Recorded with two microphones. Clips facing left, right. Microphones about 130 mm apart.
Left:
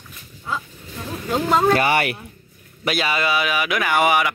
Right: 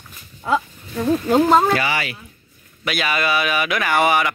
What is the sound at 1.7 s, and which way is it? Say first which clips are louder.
Speech: left 3 dB; 50° left (ahead or behind).